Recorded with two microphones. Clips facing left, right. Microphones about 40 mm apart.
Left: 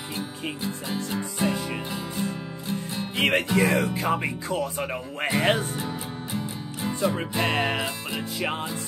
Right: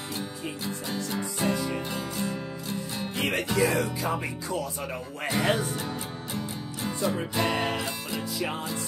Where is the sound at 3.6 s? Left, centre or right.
Left.